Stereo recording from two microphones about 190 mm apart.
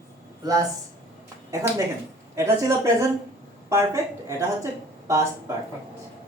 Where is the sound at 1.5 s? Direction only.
15° right (ahead or behind).